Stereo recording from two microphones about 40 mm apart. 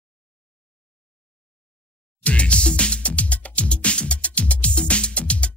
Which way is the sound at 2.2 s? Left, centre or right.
Left.